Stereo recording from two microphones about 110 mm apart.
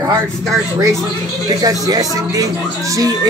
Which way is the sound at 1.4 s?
35° right (ahead or behind).